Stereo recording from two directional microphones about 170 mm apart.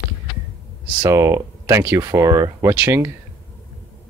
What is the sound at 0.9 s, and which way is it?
Speech, 20° right (ahead or behind).